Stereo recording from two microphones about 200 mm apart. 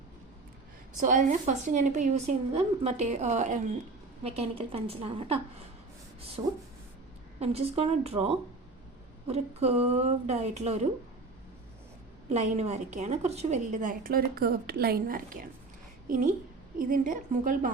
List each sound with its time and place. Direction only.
0.9 s a woman's voice: 40° right (ahead or behind)
9.2 s a woman's voice: 30° right (ahead or behind)
12.3 s a woman's voice: 35° right (ahead or behind)